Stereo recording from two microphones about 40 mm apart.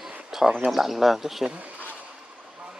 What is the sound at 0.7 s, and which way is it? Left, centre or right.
Speech, centre.